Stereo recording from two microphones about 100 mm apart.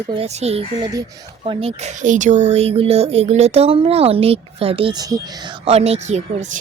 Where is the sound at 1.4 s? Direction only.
65° right (ahead or behind).